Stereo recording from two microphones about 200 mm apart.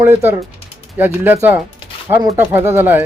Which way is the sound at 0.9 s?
10° right (ahead or behind).